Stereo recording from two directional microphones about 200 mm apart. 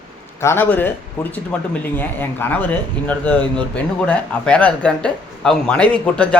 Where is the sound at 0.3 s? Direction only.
10° left (ahead or behind).